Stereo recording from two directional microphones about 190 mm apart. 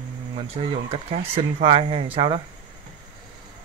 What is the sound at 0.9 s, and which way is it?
Speech, 30° right (ahead or behind).